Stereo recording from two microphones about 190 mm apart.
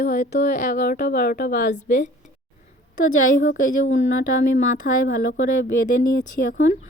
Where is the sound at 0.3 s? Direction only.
40° left (ahead or behind).